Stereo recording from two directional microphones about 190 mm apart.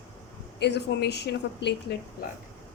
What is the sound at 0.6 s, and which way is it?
Speech, 60° left (ahead or behind).